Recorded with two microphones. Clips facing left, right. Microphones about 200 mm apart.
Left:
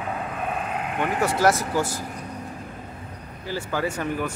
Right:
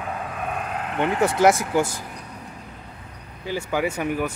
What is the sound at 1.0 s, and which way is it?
Speech, 20° right (ahead or behind).